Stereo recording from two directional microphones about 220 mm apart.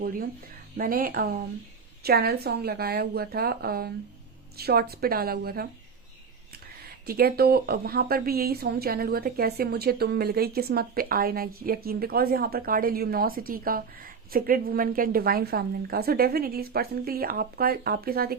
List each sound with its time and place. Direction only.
0.0 s a woman's voice: 40° right (ahead or behind)
7.1 s a woman's voice: 45° right (ahead or behind)